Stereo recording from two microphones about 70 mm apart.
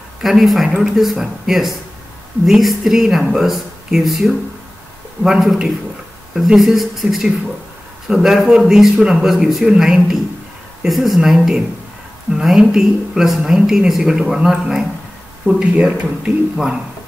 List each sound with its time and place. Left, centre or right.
0.2 s a woman's voice: centre